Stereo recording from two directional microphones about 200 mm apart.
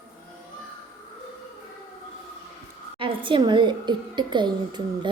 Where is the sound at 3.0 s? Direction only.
25° right (ahead or behind).